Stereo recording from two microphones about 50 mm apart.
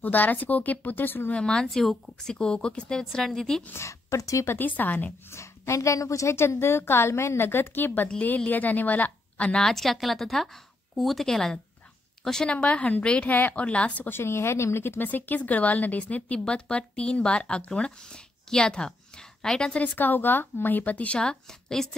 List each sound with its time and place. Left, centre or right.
0.0 s speech: left
1.3 s speech: centre
3.0 s speech: centre
3.7 s a woman's voice: left
4.5 s speech: left
5.3 s a woman's voice: left
9.5 s a woman's voice: centre
12.4 s speech: left
13.3 s speech: left
13.6 s speech: left
14.0 s speech: left; by 19.8 s centre
19.8 s speech: left; by 21.9 s centre